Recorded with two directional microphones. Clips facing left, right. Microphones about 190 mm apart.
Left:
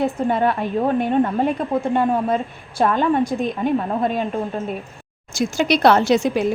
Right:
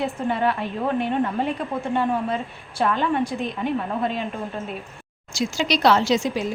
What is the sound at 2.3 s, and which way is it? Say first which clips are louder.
A woman's voice: left 5 dB; 45° left (ahead or behind).